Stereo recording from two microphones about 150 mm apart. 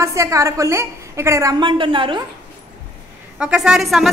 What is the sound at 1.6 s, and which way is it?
Speech, 35° right (ahead or behind).